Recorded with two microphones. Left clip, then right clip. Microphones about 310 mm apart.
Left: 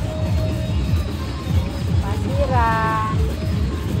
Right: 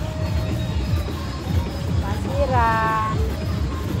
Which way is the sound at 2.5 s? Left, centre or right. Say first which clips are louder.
Even; centre.